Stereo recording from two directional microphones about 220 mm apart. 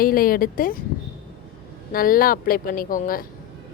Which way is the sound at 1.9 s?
40° left (ahead or behind).